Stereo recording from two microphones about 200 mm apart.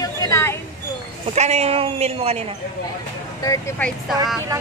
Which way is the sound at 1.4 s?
35° right (ahead or behind).